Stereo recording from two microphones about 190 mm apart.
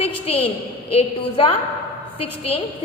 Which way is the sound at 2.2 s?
30° left (ahead or behind).